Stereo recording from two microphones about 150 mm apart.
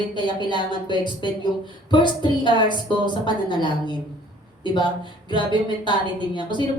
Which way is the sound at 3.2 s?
30° left (ahead or behind).